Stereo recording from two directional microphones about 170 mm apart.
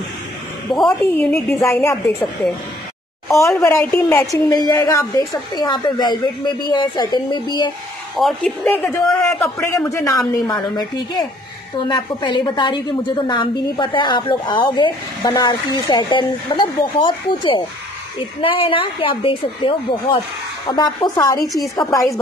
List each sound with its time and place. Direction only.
0.7 s a woman's voice: centre (ahead or behind)
1.5 s a woman's voice: 15° left (ahead or behind)
3.3 s a woman's voice: 15° left (ahead or behind)
8.2 s a woman's voice: centre (ahead or behind)
9.0 s a woman's voice: 15° left (ahead or behind)